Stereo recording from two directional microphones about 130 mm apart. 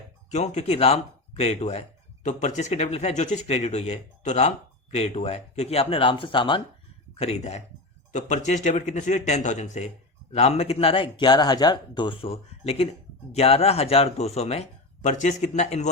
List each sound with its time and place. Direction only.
0.3 s speech: 60° left (ahead or behind)
2.2 s speech: 65° left (ahead or behind); by 6.6 s 40° left (ahead or behind)
7.2 s speech: 55° left (ahead or behind)
8.1 s a man's voice: 70° left (ahead or behind)